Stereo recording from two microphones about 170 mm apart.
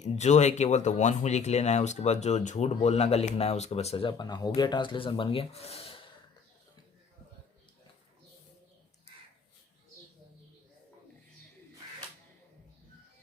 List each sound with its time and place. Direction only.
0.0 s speech: 45° left (ahead or behind)